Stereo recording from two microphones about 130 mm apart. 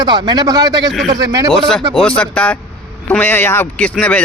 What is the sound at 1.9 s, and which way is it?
Speech, 10° left (ahead or behind).